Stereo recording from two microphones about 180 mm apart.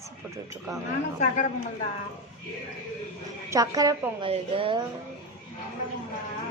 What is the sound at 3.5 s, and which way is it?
Speech, 20° right (ahead or behind).